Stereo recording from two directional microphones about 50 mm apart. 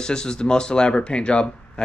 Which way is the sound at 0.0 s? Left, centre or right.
Centre.